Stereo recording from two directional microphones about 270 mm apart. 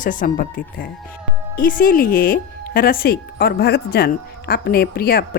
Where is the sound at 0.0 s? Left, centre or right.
Left.